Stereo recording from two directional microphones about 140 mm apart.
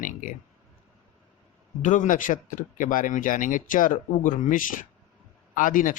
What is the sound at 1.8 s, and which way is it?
Speech, 65° left (ahead or behind).